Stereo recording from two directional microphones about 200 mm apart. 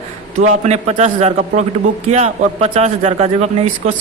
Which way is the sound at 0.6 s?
35° right (ahead or behind).